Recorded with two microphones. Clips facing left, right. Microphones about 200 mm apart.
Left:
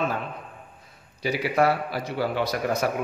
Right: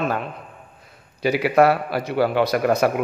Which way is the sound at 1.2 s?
70° right (ahead or behind).